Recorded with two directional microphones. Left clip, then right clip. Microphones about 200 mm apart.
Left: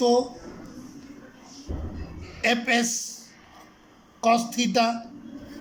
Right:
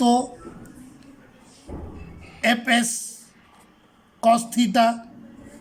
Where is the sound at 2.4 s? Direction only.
45° right (ahead or behind).